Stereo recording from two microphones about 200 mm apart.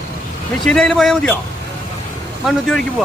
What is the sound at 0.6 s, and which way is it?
Speech, centre (ahead or behind).